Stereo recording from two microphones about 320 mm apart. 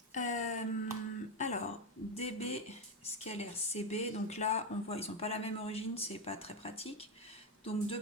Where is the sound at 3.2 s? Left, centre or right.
Centre.